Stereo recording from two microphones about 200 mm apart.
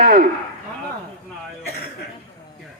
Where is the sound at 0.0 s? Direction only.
45° right (ahead or behind).